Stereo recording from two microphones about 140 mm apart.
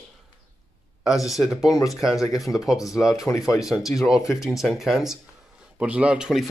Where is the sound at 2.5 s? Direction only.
15° left (ahead or behind).